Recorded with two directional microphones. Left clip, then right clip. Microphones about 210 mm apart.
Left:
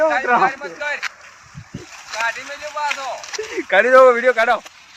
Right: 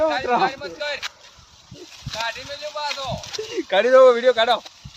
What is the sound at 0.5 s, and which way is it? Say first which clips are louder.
Speech: left 3 dB; 45° right (ahead or behind).